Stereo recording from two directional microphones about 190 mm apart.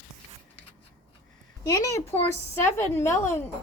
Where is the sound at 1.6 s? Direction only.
15° left (ahead or behind).